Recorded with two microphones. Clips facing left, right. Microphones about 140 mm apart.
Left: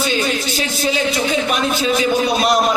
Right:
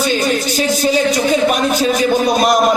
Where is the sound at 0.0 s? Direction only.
45° right (ahead or behind).